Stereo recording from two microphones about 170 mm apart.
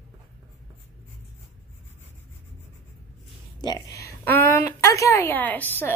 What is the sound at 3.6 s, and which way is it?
A woman's voice, 20° left (ahead or behind).